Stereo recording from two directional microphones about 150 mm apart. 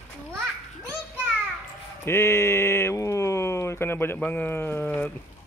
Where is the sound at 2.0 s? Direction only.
15° left (ahead or behind).